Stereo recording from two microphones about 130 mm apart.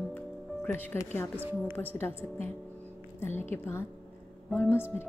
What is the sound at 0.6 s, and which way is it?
Speech, 15° left (ahead or behind).